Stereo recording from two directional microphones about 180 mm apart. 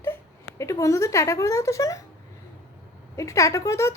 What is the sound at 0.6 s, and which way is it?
Speech, 15° left (ahead or behind).